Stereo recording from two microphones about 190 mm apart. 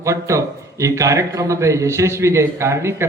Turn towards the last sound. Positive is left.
turn(degrees=-15)  # may be behind; listen again after turning